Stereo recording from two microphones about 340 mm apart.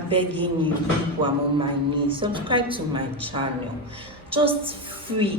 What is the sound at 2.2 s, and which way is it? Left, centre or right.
A woman's voice, centre.